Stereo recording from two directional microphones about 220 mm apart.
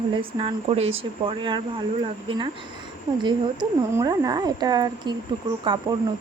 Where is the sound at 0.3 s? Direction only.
25° right (ahead or behind).